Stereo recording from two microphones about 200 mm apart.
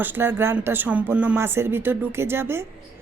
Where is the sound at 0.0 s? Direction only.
10° right (ahead or behind).